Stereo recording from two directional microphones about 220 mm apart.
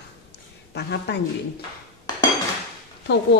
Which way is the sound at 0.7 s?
50° left (ahead or behind).